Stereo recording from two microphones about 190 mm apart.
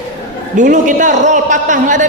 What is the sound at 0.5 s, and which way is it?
A man's voice, 40° right (ahead or behind).